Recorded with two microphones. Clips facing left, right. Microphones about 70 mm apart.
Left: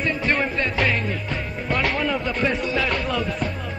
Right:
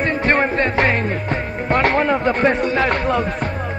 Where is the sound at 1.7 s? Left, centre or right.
Right.